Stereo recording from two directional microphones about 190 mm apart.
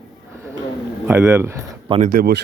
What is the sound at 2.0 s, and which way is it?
Speech, 50° right (ahead or behind).